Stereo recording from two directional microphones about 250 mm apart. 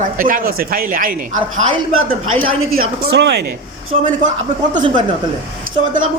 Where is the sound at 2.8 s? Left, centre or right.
Right.